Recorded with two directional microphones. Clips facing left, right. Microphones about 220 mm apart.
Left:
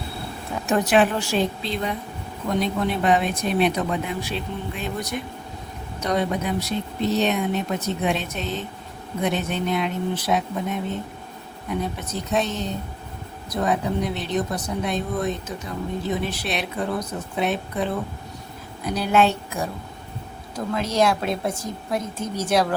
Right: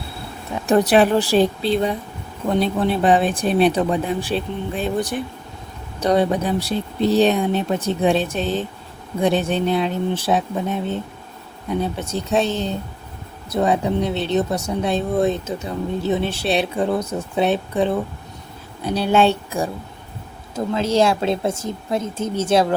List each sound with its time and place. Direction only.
0.7 s speech: 35° right (ahead or behind)
20.7 s speech: 25° right (ahead or behind)